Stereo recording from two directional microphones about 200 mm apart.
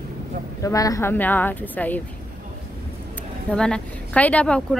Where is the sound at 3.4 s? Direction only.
5° left (ahead or behind).